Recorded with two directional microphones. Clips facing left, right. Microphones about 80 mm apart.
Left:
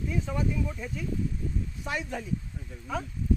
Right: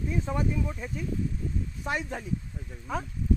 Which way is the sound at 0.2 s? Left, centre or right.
Right.